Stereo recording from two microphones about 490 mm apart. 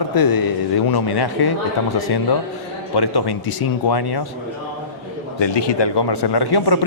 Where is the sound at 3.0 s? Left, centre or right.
Left.